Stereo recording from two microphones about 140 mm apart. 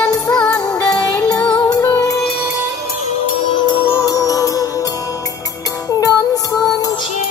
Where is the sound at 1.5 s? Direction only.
25° left (ahead or behind).